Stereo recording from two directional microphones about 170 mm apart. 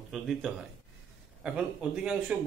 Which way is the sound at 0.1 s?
Centre (ahead or behind).